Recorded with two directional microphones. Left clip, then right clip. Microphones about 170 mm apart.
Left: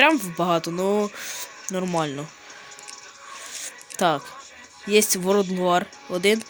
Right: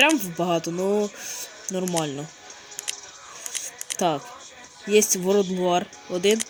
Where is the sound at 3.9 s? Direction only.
15° left (ahead or behind).